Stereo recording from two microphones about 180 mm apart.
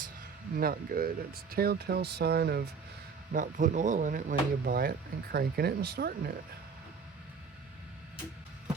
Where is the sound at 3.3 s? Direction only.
45° right (ahead or behind).